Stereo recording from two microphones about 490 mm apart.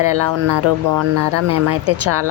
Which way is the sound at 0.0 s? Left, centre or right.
Right.